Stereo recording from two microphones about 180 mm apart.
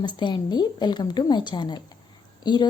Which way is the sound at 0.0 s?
25° left (ahead or behind).